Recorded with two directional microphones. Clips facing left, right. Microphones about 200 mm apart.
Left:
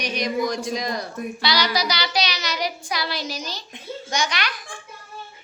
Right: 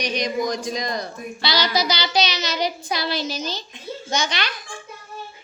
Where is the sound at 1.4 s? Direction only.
25° right (ahead or behind).